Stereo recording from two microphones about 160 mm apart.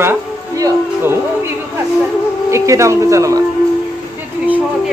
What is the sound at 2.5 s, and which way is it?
Speech, 20° right (ahead or behind).